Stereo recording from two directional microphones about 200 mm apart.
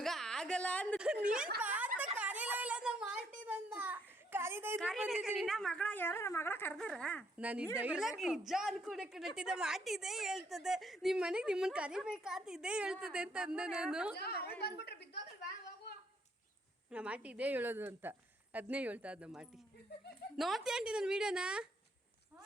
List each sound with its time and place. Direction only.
0.0 s a sound: centre (ahead or behind)
0.9 s a woman's voice: 5° right (ahead or behind)
1.6 s a sound: 10° right (ahead or behind)
4.8 s a woman's voice: centre (ahead or behind)
7.3 s a woman's voice: 5° right (ahead or behind)
14.2 s a woman's voice: 55° left (ahead or behind)
16.9 s a woman's voice: 5° right (ahead or behind)